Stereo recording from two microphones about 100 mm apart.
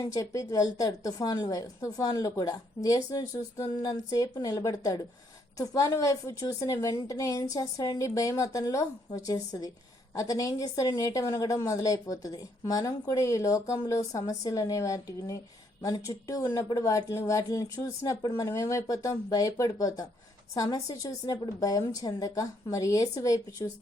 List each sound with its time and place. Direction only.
0.0 s a woman's voice: 35° left (ahead or behind)